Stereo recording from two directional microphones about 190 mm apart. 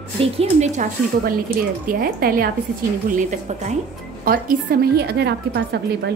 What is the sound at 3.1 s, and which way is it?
Speech, 40° right (ahead or behind).